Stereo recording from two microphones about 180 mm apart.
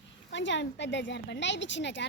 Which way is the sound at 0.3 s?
85° left.